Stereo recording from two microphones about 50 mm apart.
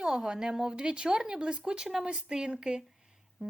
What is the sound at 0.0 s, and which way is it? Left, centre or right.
A woman's voice, centre.